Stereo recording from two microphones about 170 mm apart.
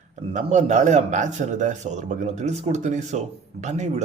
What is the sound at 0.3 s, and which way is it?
A man's voice, 45° right (ahead or behind).